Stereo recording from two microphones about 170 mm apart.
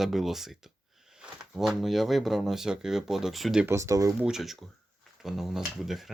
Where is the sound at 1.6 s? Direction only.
Centre (ahead or behind).